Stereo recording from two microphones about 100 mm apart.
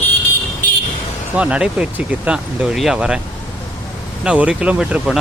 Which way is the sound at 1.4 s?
10° right (ahead or behind).